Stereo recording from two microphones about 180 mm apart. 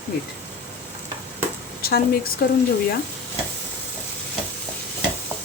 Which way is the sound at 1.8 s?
60° left (ahead or behind).